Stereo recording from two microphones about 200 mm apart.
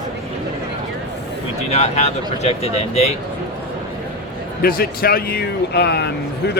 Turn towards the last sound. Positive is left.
turn(degrees=55)  # may be behind; listen again after turning